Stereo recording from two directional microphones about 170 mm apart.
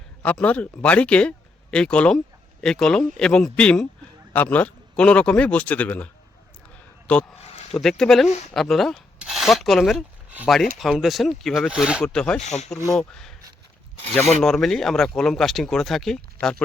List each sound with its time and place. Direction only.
0.2 s a man's voice: 10° left (ahead or behind)
7.1 s a man's voice: 5° left (ahead or behind)
12.4 s speech: 40° left (ahead or behind)
13.0 s speech: 5° left (ahead or behind)
14.4 s speech: 5° left (ahead or behind)